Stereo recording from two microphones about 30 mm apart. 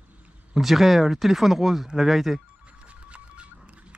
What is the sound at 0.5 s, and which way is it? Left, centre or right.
Speech, centre.